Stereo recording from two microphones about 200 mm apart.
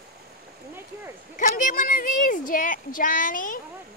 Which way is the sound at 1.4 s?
40° left (ahead or behind).